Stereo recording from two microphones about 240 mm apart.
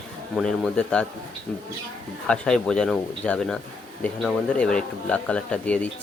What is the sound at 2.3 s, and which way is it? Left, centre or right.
Speech, centre.